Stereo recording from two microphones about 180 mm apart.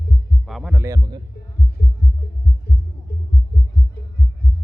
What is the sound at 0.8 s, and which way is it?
Heart sounds, 20° right (ahead or behind).